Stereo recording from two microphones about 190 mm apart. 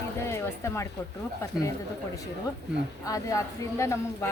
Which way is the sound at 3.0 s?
15° left (ahead or behind).